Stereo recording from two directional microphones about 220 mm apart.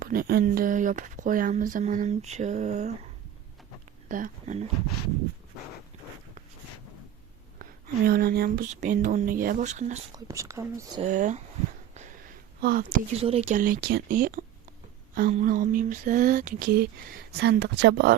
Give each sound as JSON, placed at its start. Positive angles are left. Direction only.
{"t": 0.0, "sound": "speech", "side_deg": -40}
{"t": 4.1, "sound": "speech", "side_deg": -35}
{"t": 7.6, "sound": "speech", "side_deg": -45}
{"t": 10.1, "sound": "speech", "side_deg": -15}
{"t": 11.0, "sound": "speech", "side_deg": -35}
{"t": 12.6, "sound": "speech", "side_deg": -40}